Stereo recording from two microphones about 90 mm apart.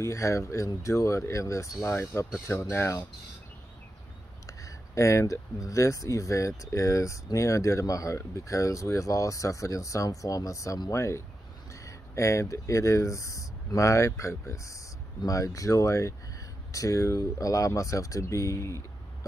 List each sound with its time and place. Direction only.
0.0 s speech: 35° left (ahead or behind)
4.5 s speech: 35° left (ahead or behind)